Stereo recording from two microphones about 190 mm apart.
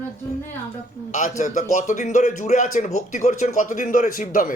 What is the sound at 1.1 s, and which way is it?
A man's voice, 40° left (ahead or behind).